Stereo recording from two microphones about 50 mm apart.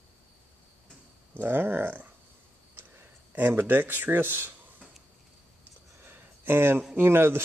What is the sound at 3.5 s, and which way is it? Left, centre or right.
Speech, right.